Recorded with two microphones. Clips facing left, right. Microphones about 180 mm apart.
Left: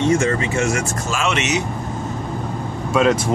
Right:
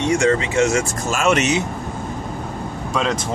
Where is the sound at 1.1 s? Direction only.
45° right (ahead or behind).